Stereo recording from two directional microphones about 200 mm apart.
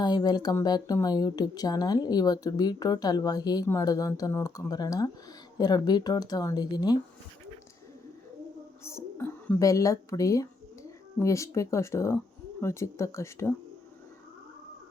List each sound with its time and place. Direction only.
0.0 s speech: 20° left (ahead or behind)
8.8 s speech: 15° left (ahead or behind)